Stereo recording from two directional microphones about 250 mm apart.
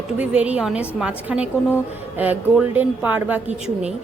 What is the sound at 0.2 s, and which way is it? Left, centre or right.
A woman's voice, centre.